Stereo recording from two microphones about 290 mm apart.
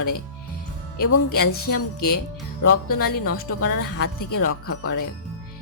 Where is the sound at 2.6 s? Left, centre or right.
Left.